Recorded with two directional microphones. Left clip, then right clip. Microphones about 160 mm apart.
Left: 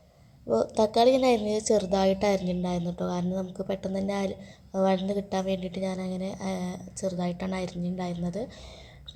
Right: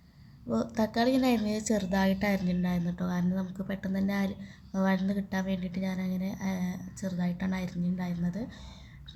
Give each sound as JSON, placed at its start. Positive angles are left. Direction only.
{"t": 0.5, "sound": "speech", "side_deg": 15}